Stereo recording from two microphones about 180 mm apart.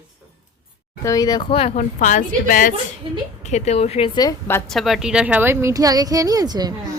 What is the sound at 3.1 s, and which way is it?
Speech, 30° right (ahead or behind).